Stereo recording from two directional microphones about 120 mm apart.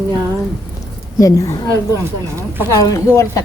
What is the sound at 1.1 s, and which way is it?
Speech, 30° left (ahead or behind).